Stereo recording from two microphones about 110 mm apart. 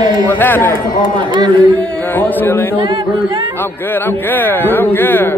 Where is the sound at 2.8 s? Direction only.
45° right (ahead or behind).